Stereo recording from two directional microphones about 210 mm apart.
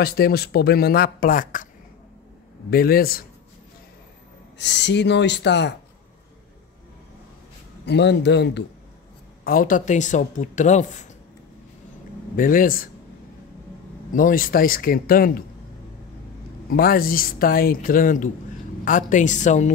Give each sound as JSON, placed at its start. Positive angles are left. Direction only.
{"t": 0.0, "sound": "speech", "side_deg": 45}
{"t": 2.7, "sound": "speech", "side_deg": 45}
{"t": 4.6, "sound": "speech", "side_deg": 55}
{"t": 7.8, "sound": "speech", "side_deg": 55}
{"t": 9.4, "sound": "speech", "side_deg": 45}
{"t": 12.4, "sound": "speech", "side_deg": 40}
{"t": 14.1, "sound": "speech", "side_deg": 40}
{"t": 16.7, "sound": "speech", "side_deg": 45}